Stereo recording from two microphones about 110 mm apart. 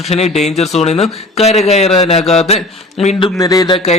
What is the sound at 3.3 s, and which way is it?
Speech, 35° left (ahead or behind).